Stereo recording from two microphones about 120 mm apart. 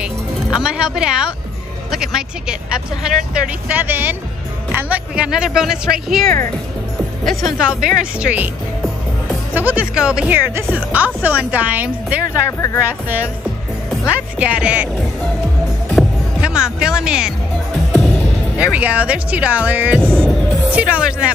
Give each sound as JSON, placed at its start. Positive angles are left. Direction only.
{"t": 0.0, "sound": "music", "side_deg": -5}
{"t": 1.9, "sound": "speech", "side_deg": -5}
{"t": 3.3, "sound": "speech", "side_deg": -15}
{"t": 9.5, "sound": "speech", "side_deg": -15}
{"t": 12.4, "sound": "speech", "side_deg": 25}
{"t": 12.8, "sound": "speech", "side_deg": -15}
{"t": 14.4, "sound": "speech", "side_deg": -10}
{"t": 15.9, "sound": "speech", "side_deg": -5}
{"t": 18.6, "sound": "speech", "side_deg": -10}
{"t": 20.0, "sound": "music", "side_deg": 5}
{"t": 20.7, "sound": "speech", "side_deg": -10}